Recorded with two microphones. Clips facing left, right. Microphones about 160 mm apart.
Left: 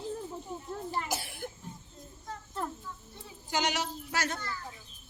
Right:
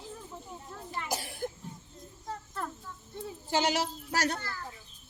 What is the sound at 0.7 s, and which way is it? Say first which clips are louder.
Children playing: left 5 dB; 35° left (ahead or behind).